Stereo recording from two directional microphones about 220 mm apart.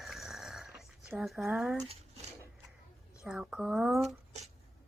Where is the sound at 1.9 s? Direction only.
30° right (ahead or behind).